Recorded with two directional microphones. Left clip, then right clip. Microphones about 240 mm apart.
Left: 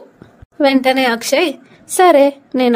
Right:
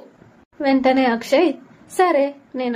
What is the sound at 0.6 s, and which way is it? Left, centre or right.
A woman's voice, left.